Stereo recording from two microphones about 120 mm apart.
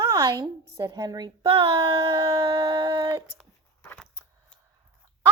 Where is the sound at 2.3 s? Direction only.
45° right (ahead or behind).